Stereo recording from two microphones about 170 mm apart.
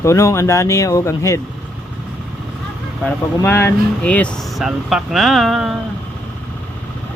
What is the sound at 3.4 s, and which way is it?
Speech, 15° left (ahead or behind).